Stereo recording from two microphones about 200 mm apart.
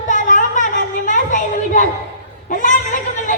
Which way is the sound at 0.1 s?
40° left (ahead or behind).